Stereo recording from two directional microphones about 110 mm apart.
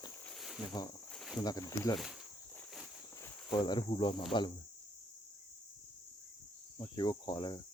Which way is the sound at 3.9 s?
45° left (ahead or behind).